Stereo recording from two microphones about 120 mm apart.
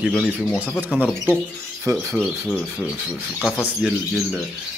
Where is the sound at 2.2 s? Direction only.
10° left (ahead or behind).